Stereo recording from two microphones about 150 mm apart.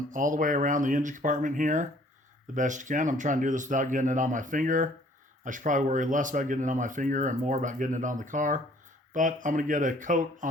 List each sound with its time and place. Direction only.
0.1 s speech: 60° right (ahead or behind)